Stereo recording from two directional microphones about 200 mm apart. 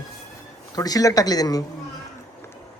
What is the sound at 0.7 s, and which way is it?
Speech, 20° left (ahead or behind).